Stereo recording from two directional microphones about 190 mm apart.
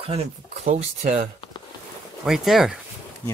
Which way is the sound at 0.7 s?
35° right (ahead or behind).